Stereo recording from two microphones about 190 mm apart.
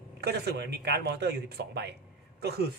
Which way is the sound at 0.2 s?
60° right (ahead or behind).